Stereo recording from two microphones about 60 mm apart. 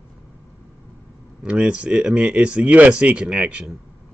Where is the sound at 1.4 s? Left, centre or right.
Centre.